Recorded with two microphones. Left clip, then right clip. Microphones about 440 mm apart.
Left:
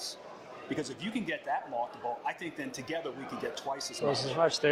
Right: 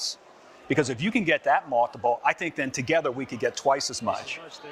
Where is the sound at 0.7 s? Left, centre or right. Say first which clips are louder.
Right 12 dB; right.